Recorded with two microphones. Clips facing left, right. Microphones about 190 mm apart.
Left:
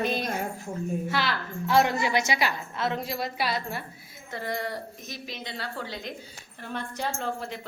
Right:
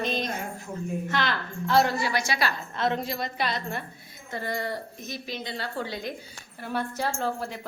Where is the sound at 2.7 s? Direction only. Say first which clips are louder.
Right 4 dB; 5° left (ahead or behind).